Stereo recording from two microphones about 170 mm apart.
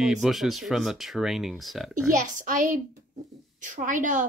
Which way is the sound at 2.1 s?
50° right (ahead or behind).